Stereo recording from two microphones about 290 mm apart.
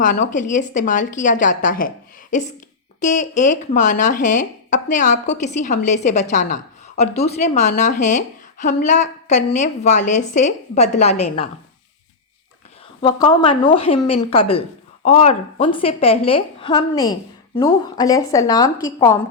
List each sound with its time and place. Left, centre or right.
0.0 s speech: left
13.0 s a woman's voice: centre